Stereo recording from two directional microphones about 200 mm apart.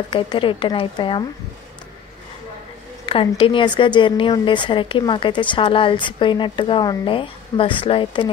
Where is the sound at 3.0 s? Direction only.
25° left (ahead or behind).